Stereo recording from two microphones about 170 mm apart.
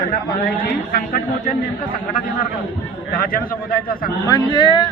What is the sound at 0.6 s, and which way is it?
A man's voice, 60° left (ahead or behind).